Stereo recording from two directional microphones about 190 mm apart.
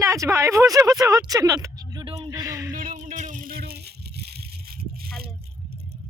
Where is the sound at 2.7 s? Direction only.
40° right (ahead or behind).